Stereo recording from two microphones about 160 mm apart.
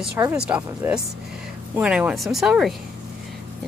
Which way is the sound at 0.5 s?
10° right (ahead or behind).